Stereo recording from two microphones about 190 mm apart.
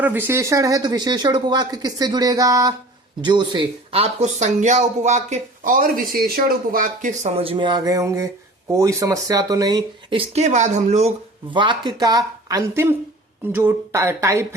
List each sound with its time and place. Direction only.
0.0 s speech: 10° right (ahead or behind); by 11.1 s 35° right (ahead or behind)
11.5 s speech: 25° right (ahead or behind)